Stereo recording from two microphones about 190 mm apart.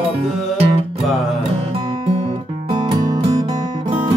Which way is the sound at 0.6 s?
30° right (ahead or behind).